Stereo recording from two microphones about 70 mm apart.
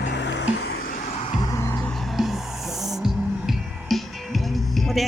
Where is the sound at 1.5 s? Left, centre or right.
Left.